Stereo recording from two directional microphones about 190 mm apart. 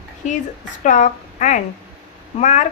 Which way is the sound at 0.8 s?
40° left (ahead or behind).